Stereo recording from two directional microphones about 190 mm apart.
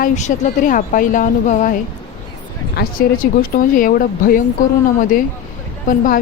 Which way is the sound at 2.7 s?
45° left (ahead or behind).